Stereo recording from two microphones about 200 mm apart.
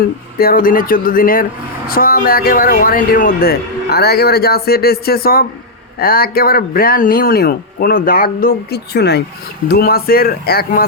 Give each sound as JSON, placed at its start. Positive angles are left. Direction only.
{"t": 0.3, "sound": "speech", "side_deg": 45}